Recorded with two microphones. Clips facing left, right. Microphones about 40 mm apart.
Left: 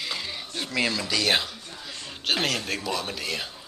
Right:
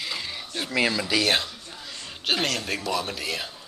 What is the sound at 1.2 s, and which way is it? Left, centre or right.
Speech, centre.